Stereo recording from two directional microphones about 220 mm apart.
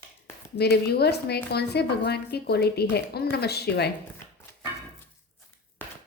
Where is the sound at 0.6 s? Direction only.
45° left (ahead or behind).